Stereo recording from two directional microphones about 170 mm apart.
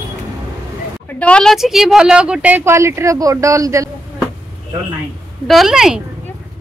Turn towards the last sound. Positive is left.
turn(degrees=-5)  # may be behind; listen again after turning